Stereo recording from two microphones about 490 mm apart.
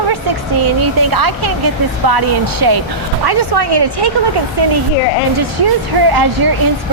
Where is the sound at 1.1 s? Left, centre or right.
Right.